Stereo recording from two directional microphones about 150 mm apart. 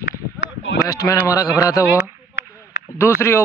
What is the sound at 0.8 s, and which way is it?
Speech, 20° left (ahead or behind).